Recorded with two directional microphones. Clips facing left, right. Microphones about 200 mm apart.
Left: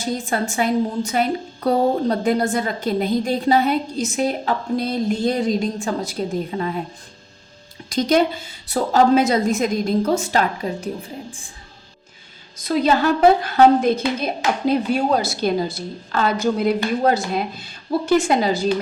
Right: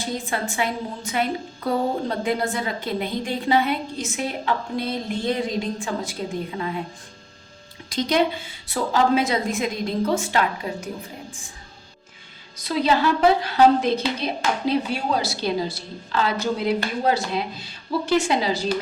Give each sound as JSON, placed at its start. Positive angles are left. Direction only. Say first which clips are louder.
{"t": 0.0, "sound": "a woman's voice", "louder": "left 4 dB", "side_deg": 45}
{"t": 7.9, "sound": "a woman's voice", "louder": "left 4 dB", "side_deg": 45}
{"t": 12.6, "sound": "a woman's voice", "louder": "left 3 dB", "side_deg": 45}